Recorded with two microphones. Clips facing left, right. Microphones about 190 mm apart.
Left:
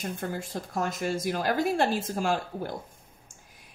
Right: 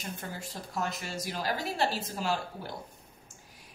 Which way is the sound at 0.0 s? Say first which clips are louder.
Left 7 dB; 50° left (ahead or behind).